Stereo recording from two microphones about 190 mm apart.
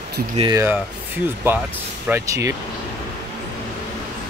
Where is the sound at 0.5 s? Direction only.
10° right (ahead or behind).